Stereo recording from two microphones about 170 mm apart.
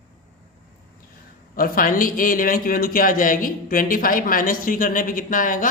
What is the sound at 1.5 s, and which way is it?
A man's voice, 55° left (ahead or behind).